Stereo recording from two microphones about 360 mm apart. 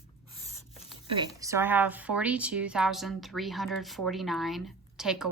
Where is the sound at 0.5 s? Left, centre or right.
Centre.